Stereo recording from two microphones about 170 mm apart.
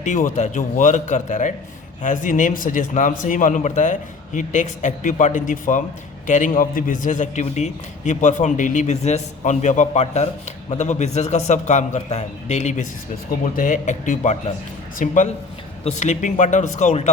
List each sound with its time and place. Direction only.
0.0 s a man's voice: 50° left (ahead or behind)